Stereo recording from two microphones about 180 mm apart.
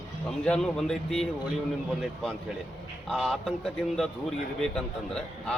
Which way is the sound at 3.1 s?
Centre (ahead or behind).